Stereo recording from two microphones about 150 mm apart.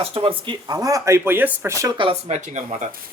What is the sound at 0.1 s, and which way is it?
Speech, 35° right (ahead or behind).